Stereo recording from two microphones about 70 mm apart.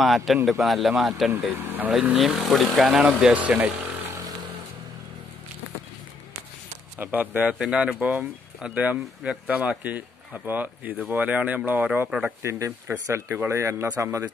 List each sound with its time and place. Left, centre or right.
0.0 s a man's voice: centre
1.5 s speech: right
2.1 s speech: centre; by 3.7 s right
7.0 s speech: right
12.1 s speech: centre
12.4 s speech: right